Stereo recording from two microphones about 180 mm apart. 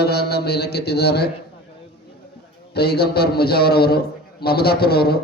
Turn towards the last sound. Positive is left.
turn(degrees=60)  # may be behind; listen again after turning